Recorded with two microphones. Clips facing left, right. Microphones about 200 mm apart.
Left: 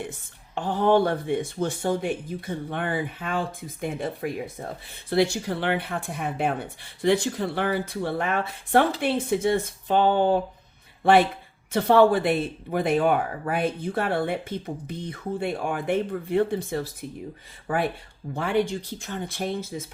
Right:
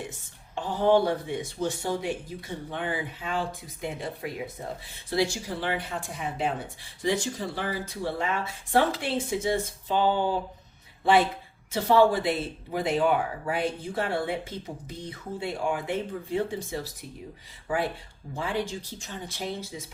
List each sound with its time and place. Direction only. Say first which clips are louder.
0.5 s speech: left 2 dB; 55° left (ahead or behind)
11.7 s speech: left 3 dB; 60° left (ahead or behind)
18.3 s speech: left 6 dB; 60° left (ahead or behind)